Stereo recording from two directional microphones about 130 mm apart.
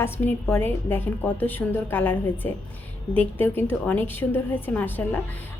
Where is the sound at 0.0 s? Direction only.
15° left (ahead or behind).